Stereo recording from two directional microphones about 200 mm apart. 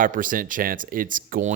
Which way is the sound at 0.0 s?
45° right (ahead or behind).